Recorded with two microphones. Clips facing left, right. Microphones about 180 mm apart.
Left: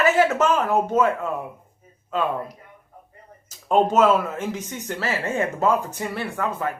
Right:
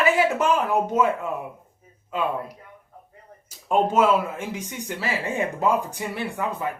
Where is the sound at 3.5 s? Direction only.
10° right (ahead or behind).